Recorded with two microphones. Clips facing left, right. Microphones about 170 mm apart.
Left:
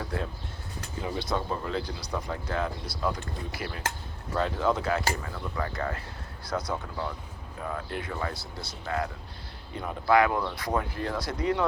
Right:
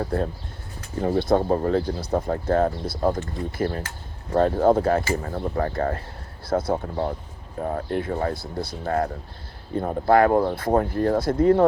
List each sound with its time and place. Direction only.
0.0 s speech: 45° right (ahead or behind)